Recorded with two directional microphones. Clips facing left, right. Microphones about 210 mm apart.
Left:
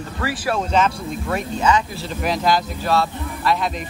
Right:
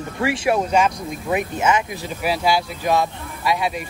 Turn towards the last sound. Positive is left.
turn(degrees=-10)  # may be behind; listen again after turning